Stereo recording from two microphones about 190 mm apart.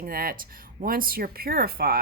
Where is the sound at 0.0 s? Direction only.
50° right (ahead or behind).